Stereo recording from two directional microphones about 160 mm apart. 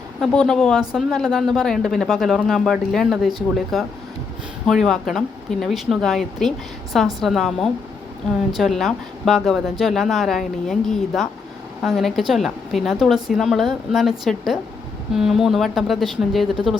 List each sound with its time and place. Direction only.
0.2 s speech: centre (ahead or behind)